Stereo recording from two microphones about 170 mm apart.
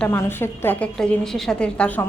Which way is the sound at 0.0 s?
10° left (ahead or behind).